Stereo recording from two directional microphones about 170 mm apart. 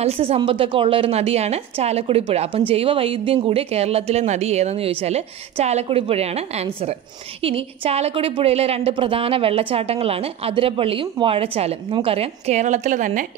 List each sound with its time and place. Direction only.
0.0 s a woman's voice: 40° right (ahead or behind)